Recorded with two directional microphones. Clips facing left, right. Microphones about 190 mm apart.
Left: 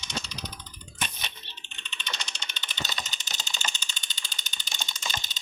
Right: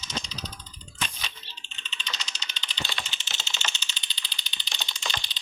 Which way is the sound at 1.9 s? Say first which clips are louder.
Left 1 dB; 55° left (ahead or behind).